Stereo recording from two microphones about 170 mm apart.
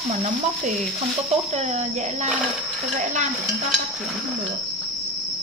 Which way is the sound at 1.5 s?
40° right (ahead or behind).